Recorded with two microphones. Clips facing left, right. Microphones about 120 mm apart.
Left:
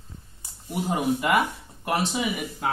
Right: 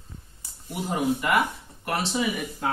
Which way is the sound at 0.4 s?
20° left (ahead or behind).